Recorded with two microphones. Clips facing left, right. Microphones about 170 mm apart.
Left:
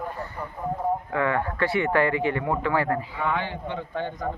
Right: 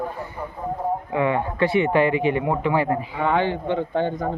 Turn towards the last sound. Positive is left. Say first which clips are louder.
# right 7 dB
turn(degrees=-25)  # may be behind; listen again after turning